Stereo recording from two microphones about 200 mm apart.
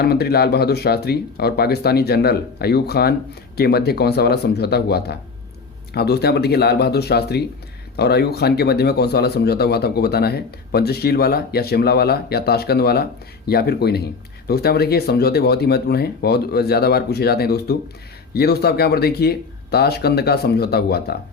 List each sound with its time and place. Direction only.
0.0 s speech: 50° left (ahead or behind)